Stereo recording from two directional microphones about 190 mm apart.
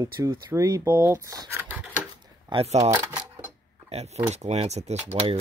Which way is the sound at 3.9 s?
35° right (ahead or behind).